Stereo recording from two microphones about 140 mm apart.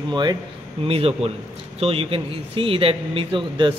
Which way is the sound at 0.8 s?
45° right (ahead or behind).